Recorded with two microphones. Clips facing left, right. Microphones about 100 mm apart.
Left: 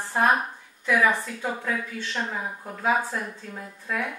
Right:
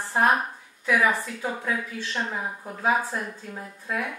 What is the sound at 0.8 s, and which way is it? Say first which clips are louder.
A woman's voice: even; 10° right (ahead or behind).